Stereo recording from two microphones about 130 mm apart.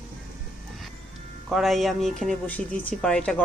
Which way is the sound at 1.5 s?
Centre (ahead or behind).